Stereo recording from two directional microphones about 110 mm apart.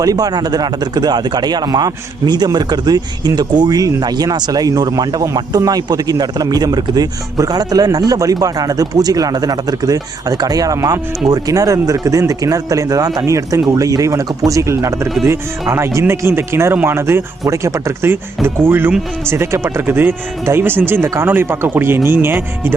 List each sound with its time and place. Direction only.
0.0 s speech: 35° right (ahead or behind); by 22.7 s 20° right (ahead or behind)